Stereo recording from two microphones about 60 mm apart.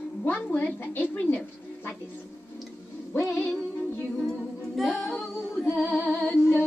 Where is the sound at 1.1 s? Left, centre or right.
Left.